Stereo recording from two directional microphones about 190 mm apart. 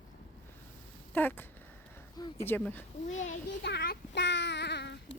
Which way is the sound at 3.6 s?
60° left (ahead or behind).